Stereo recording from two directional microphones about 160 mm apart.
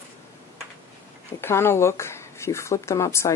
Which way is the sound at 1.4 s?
15° left (ahead or behind).